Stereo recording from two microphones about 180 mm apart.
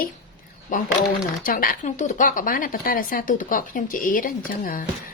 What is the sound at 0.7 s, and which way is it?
A woman's voice, 45° left (ahead or behind).